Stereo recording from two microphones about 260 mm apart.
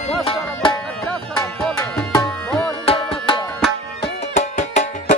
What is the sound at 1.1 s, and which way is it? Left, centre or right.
Music, centre.